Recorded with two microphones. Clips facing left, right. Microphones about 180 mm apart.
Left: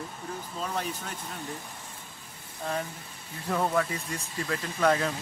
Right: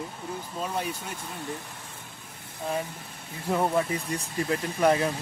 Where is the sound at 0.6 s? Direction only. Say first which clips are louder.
Right 2 dB; 15° right (ahead or behind).